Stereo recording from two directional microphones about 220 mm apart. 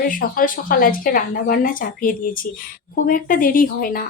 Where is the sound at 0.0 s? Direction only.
40° left (ahead or behind).